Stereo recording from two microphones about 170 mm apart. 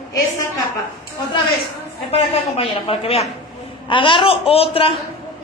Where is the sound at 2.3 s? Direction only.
30° left (ahead or behind).